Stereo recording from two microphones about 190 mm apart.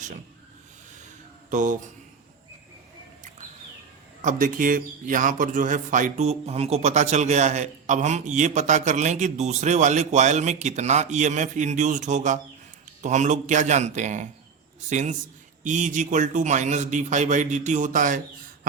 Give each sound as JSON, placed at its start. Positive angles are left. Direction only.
{"t": 1.5, "sound": "speech", "side_deg": -40}
{"t": 4.2, "sound": "a man's voice", "side_deg": -45}